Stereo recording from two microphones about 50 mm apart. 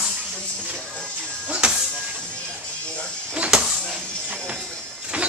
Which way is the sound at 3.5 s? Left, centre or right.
Centre.